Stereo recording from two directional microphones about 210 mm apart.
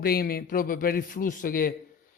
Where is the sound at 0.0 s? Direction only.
45° left (ahead or behind).